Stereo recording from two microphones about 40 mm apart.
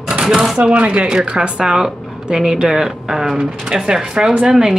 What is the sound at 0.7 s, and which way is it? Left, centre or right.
A woman's voice, right.